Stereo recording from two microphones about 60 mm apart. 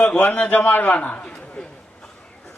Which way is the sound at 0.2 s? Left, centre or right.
Left.